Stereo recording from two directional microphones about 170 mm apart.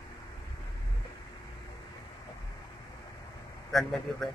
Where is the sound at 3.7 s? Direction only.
Centre (ahead or behind).